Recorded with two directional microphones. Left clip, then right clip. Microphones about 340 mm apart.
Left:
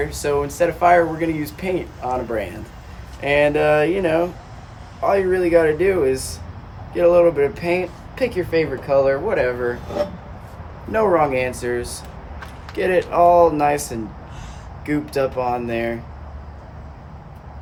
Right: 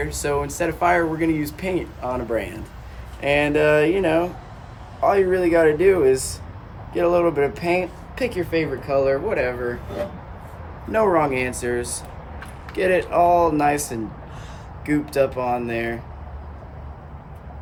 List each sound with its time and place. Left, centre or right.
0.0 s speech: centre
10.9 s speech: centre